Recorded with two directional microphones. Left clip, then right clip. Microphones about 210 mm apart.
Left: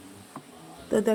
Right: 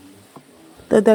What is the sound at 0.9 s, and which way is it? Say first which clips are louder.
Speech: right 10 dB; 40° right (ahead or behind).